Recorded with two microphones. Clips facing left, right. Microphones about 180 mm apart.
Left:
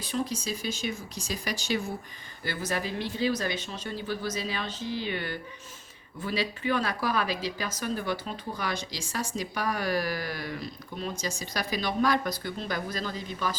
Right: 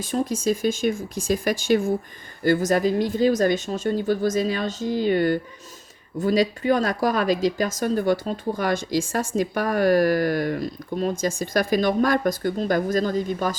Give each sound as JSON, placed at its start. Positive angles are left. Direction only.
{"t": 0.0, "sound": "speech", "side_deg": -50}